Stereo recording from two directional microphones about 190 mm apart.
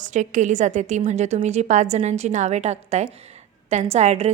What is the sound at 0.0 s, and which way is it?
A woman's voice, 40° right (ahead or behind).